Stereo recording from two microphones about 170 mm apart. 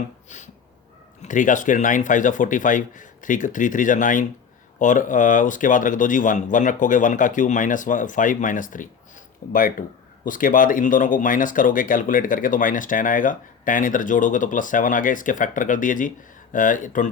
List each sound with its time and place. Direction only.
0.3 s speech: 45° left (ahead or behind)